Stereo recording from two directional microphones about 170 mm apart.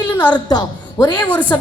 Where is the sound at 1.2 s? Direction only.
10° left (ahead or behind).